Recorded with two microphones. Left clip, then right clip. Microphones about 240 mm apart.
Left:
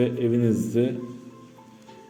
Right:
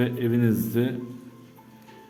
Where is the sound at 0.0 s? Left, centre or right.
Centre.